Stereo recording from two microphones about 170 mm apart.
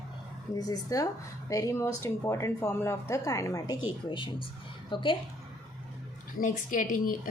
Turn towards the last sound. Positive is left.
turn(degrees=50)  # may be behind; listen again after turning